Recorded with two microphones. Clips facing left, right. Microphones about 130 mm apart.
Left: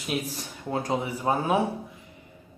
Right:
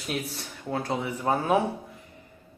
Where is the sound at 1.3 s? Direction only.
20° left (ahead or behind).